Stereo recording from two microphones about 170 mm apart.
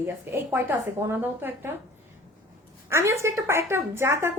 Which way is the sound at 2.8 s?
15° right (ahead or behind).